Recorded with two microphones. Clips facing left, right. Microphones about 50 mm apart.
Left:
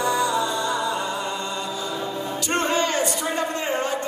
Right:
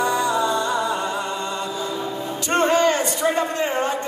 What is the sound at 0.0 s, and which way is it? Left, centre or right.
Music, right.